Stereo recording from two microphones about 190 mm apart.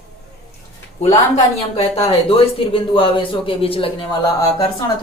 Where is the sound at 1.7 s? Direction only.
30° left (ahead or behind).